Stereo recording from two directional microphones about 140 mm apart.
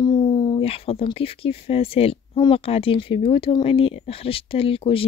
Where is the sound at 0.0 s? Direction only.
35° left (ahead or behind).